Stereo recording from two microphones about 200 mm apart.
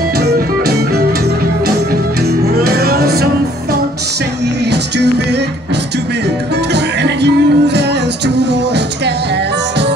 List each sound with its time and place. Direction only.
0.2 s music: 55° right (ahead or behind)
2.2 s music: 55° right (ahead or behind)
4.6 s music: 55° right (ahead or behind)
6.7 s music: 60° right (ahead or behind)